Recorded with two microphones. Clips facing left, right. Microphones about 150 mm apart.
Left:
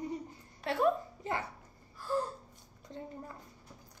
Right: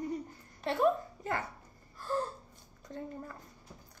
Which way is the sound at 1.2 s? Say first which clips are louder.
Right 1 dB; 20° left (ahead or behind).